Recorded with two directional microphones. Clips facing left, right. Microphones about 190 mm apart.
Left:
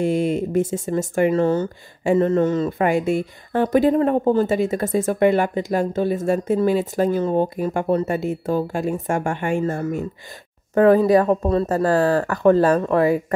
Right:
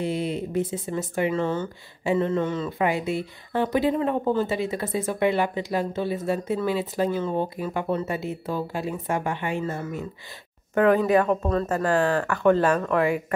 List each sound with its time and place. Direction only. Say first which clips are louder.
0.0 s speech: left 7 dB; 45° left (ahead or behind)
10.7 s speech: left 5 dB; 35° left (ahead or behind)